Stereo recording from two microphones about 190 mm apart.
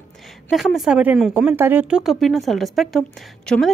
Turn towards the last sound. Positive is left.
turn(degrees=5)  # may be behind; listen again after turning